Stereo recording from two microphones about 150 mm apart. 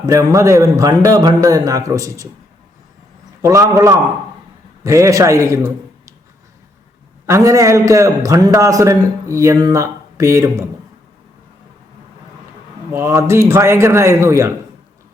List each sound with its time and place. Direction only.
0.0 s a man's voice: 20° right (ahead or behind)
3.4 s a man's voice: 20° right (ahead or behind)
7.3 s a man's voice: 20° right (ahead or behind)
12.9 s a man's voice: 15° right (ahead or behind)